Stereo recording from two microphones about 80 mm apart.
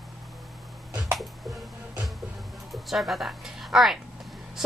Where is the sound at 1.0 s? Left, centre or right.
Centre.